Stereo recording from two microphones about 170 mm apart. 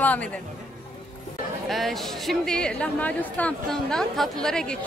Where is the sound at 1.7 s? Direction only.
Centre (ahead or behind).